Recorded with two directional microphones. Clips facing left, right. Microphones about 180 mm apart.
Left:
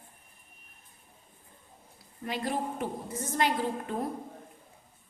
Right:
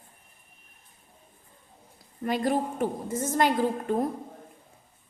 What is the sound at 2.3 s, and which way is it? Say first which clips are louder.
A woman's voice: right 6 dB; 45° right (ahead or behind).